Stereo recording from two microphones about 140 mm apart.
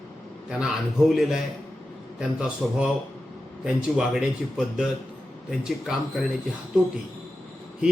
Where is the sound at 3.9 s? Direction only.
5° right (ahead or behind).